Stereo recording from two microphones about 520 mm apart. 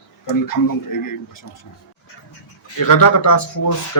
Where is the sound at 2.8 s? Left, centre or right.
Left.